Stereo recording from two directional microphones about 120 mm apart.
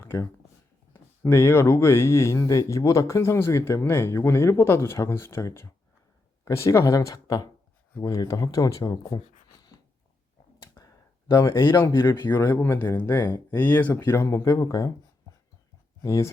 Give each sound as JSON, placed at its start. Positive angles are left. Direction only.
{"t": 0.0, "sound": "a sound", "side_deg": 20}
{"t": 0.9, "sound": "speech", "side_deg": 20}
{"t": 11.3, "sound": "speech", "side_deg": 30}
{"t": 16.0, "sound": "speech", "side_deg": 25}